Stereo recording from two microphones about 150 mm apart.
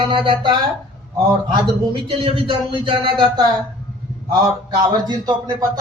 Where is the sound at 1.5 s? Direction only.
35° right (ahead or behind).